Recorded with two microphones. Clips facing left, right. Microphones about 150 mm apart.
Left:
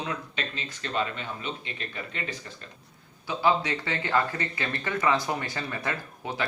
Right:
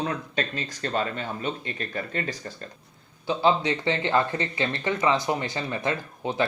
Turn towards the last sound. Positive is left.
turn(degrees=-25)  # may be behind; listen again after turning